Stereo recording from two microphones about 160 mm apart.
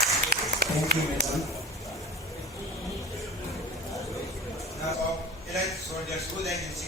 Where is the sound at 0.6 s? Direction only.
80° right.